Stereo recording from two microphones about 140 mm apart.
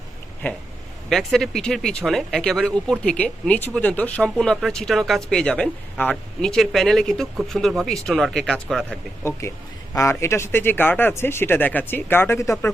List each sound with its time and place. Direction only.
1.1 s speech: centre (ahead or behind)
9.4 s a man's voice: 20° left (ahead or behind)